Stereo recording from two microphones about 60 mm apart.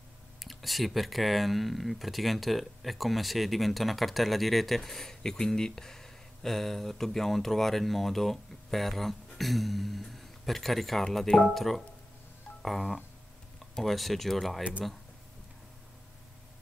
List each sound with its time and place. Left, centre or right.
0.4 s speech: centre
14.6 s speech: right